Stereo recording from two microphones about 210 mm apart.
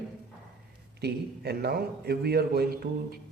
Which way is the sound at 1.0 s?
50° right (ahead or behind).